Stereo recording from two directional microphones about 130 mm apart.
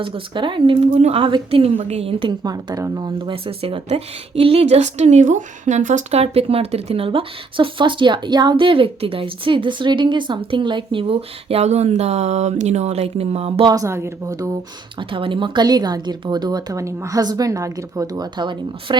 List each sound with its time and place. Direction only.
0.0 s speech: 40° right (ahead or behind)
0.9 s speech: 50° right (ahead or behind)
2.4 s speech: 30° right (ahead or behind); by 13.7 s 50° right (ahead or behind)
13.7 s speech: 25° right (ahead or behind)
15.1 s speech: 40° right (ahead or behind)